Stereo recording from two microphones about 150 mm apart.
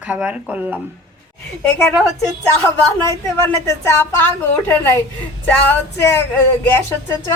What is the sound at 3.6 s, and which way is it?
A woman's voice, 20° left (ahead or behind).